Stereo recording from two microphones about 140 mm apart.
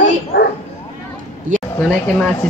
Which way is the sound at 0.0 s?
90° left.